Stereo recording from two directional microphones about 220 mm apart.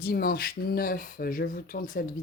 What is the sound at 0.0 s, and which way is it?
Speech, 45° left (ahead or behind).